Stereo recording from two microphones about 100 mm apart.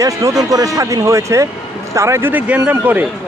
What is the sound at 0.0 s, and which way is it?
A man's voice, 30° right (ahead or behind).